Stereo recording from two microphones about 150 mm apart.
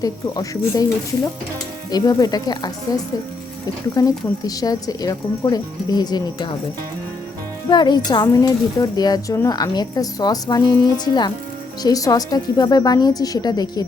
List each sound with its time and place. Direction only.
0.0 s speech: 25° left (ahead or behind)
7.7 s speech: 30° left (ahead or behind)